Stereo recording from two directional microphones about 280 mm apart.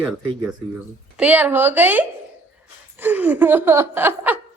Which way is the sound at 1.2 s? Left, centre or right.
Centre.